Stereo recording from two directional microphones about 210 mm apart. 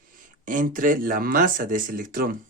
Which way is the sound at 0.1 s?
40° right (ahead or behind).